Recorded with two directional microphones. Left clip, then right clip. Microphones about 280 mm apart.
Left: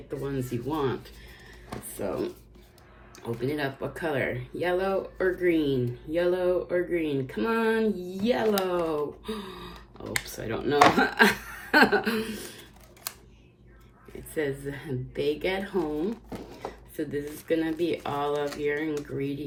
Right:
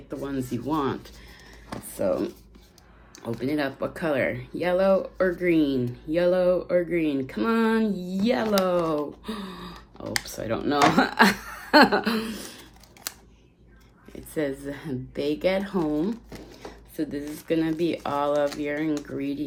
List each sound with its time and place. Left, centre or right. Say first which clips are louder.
0.2 s speech: right 2 dB; centre
14.3 s a woman's voice: right 2 dB; centre
16.3 s a sound: left 3 dB; centre
17.0 s speech: right 1 dB; centre